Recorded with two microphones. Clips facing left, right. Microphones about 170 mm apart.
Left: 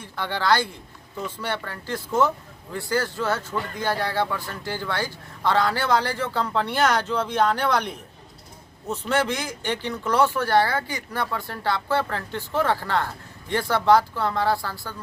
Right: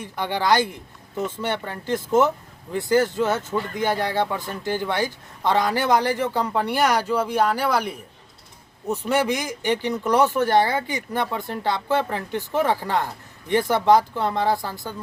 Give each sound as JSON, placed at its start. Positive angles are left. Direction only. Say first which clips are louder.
{"t": 0.0, "sound": "speech", "louder": "right 3 dB", "side_deg": -15}